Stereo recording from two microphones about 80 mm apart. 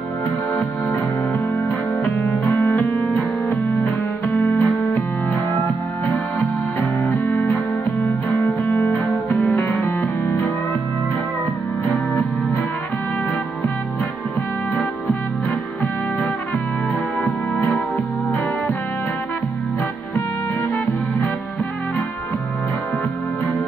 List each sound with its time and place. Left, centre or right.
2.0 s music: left
6.8 s music: left
17.2 s music: left